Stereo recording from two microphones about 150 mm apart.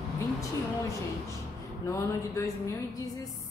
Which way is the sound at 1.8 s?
20° left (ahead or behind).